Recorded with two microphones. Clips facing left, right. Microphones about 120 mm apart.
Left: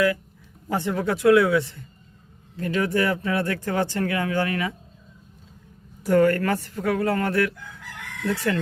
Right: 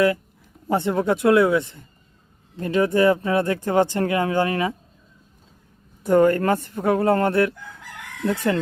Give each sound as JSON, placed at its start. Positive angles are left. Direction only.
{"t": 0.7, "sound": "speech", "side_deg": -25}
{"t": 6.0, "sound": "a woman's voice", "side_deg": -20}